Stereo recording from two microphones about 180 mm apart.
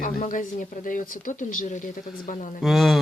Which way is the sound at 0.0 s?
50° left (ahead or behind).